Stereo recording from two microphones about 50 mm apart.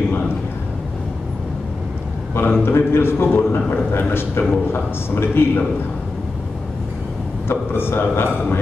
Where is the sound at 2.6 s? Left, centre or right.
Left.